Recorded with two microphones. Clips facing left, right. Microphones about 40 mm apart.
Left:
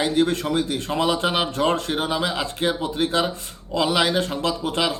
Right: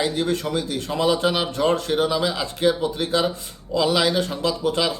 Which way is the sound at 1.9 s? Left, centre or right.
Left.